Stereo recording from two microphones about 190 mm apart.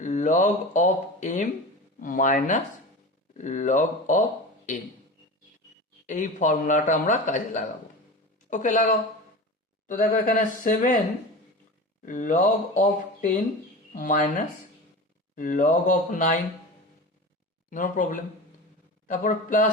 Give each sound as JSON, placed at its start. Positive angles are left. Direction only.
{"t": 0.0, "sound": "a man's voice", "side_deg": 40}
{"t": 6.1, "sound": "a man's voice", "side_deg": 45}
{"t": 12.0, "sound": "a man's voice", "side_deg": 45}
{"t": 17.7, "sound": "a man's voice", "side_deg": 45}